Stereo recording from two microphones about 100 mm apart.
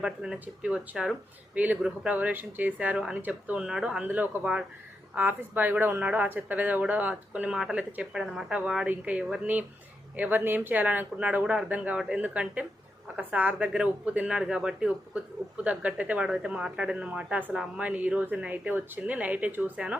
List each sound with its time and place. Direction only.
0.0 s speech: 10° right (ahead or behind)